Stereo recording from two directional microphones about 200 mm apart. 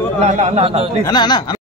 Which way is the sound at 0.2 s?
35° right (ahead or behind).